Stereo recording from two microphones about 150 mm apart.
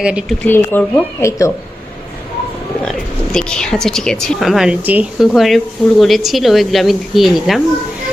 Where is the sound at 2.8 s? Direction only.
5° left (ahead or behind).